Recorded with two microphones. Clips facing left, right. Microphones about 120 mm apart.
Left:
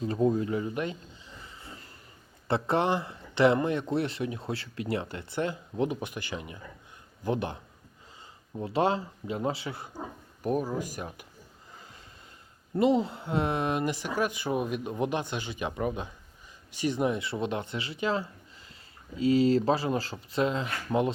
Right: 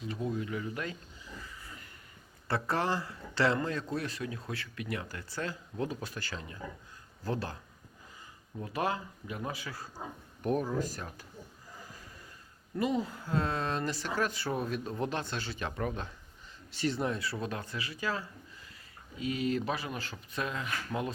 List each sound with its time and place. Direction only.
0.0 s a sound: 35° left (ahead or behind)
2.5 s a man's voice: 20° left (ahead or behind)
10.4 s speech: 5° left (ahead or behind)
11.8 s snort: 25° left (ahead or behind)
12.7 s a man's voice: 25° left (ahead or behind)